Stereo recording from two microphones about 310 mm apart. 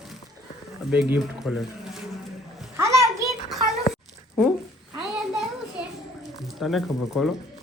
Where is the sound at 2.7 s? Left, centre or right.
Centre.